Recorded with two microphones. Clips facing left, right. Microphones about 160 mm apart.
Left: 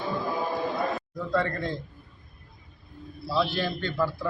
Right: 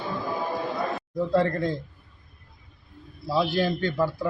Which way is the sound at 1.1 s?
30° right (ahead or behind).